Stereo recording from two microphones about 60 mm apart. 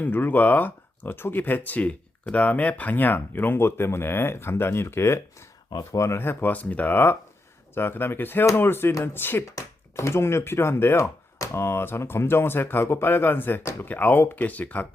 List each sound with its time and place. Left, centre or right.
0.0 s speech: left
6.1 s speech: left
6.5 s speech: left
9.9 s speech: left